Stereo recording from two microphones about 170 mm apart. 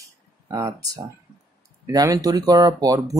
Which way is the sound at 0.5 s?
20° right (ahead or behind).